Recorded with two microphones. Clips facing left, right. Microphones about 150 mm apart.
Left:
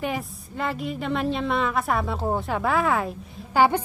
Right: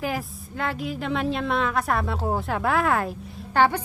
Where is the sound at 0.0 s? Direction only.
Centre (ahead or behind).